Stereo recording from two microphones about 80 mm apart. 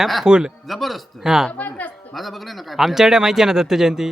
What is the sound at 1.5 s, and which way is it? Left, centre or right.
Music, centre.